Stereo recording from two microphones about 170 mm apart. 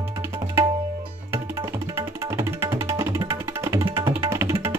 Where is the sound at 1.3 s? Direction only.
15° right (ahead or behind).